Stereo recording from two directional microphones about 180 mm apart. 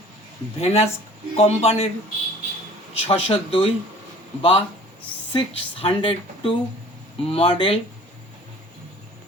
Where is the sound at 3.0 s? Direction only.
30° left (ahead or behind).